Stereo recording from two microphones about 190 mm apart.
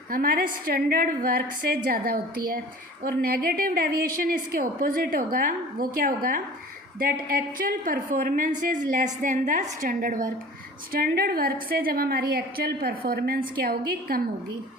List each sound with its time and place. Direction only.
0.1 s a woman's voice: 50° right (ahead or behind)